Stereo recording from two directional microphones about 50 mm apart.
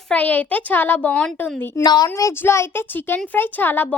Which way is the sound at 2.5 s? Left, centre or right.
Left.